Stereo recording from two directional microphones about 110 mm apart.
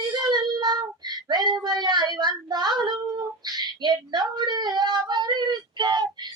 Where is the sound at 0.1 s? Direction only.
40° right (ahead or behind).